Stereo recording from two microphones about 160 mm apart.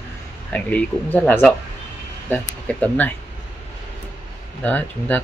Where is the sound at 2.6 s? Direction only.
10° left (ahead or behind).